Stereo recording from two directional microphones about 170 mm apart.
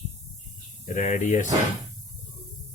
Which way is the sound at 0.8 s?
50° left (ahead or behind).